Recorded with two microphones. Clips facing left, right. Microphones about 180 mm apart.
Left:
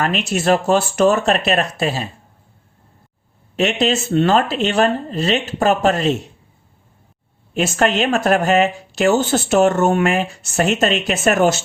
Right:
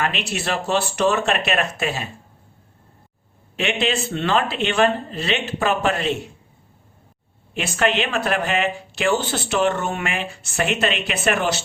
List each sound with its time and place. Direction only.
0.0 s speech: 45° left (ahead or behind)
3.5 s speech: 40° left (ahead or behind)
7.5 s speech: 45° left (ahead or behind)